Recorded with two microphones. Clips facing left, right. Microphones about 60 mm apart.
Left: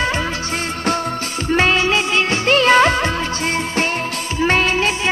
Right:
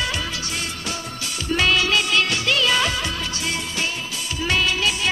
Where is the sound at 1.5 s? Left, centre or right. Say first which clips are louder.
Left 4 dB; left.